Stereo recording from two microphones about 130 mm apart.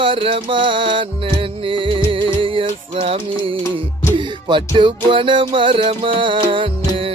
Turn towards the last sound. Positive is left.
turn(degrees=-40)  # may be behind; listen again after turning